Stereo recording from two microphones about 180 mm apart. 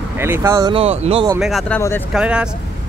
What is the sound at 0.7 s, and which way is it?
Speech, 35° right (ahead or behind).